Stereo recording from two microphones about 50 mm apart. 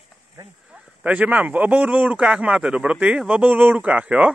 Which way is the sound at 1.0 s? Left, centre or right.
Right.